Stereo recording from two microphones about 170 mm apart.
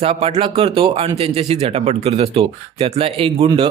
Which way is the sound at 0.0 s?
35° right (ahead or behind).